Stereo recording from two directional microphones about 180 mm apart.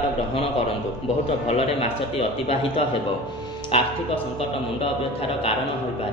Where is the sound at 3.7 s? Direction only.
30° left (ahead or behind).